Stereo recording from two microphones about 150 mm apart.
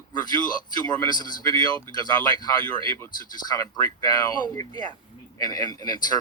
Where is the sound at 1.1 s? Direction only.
25° left (ahead or behind).